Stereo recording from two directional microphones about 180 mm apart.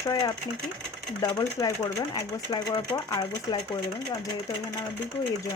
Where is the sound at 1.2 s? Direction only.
20° left (ahead or behind).